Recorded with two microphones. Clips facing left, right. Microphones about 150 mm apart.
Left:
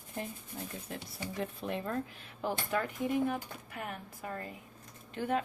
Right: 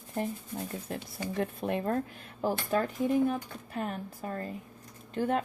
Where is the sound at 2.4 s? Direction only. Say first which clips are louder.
Right 5 dB; 35° right (ahead or behind).